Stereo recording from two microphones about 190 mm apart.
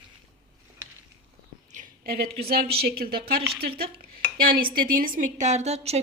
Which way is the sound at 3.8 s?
50° right (ahead or behind).